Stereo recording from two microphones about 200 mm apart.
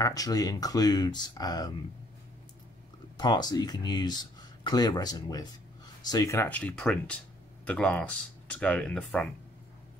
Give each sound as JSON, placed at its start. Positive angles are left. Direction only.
{"t": 0.0, "sound": "speech", "side_deg": 20}
{"t": 3.2, "sound": "speech", "side_deg": 20}